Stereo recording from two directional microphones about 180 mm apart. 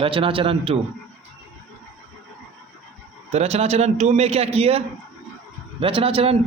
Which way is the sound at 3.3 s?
35° right (ahead or behind).